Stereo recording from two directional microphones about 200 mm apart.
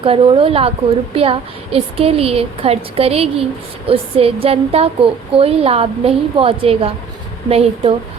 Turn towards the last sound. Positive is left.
turn(degrees=-30)  # may be behind; listen again after turning